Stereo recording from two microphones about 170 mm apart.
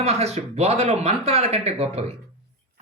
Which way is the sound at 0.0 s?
40° right (ahead or behind).